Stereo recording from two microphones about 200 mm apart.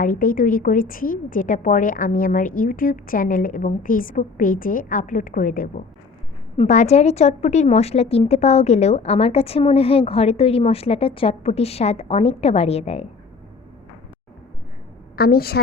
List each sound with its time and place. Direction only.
0.0 s a woman's voice: 45° left (ahead or behind)
15.1 s a woman's voice: 50° left (ahead or behind)